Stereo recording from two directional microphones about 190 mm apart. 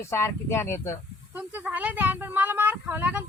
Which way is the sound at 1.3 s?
10° right (ahead or behind).